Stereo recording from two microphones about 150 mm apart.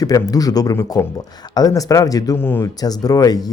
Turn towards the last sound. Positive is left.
turn(degrees=25)  # may be behind; listen again after turning